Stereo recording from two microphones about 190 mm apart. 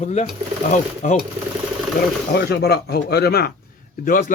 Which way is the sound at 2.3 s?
55° left (ahead or behind).